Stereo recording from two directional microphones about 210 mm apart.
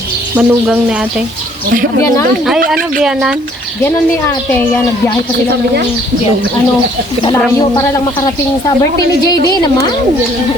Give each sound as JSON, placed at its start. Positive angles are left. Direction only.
{"t": 0.3, "sound": "a woman's voice", "side_deg": -5}
{"t": 3.0, "sound": "a woman's voice", "side_deg": -5}
{"t": 8.6, "sound": "speech", "side_deg": 20}